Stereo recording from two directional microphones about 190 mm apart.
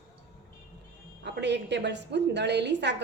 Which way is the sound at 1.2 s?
65° right (ahead or behind).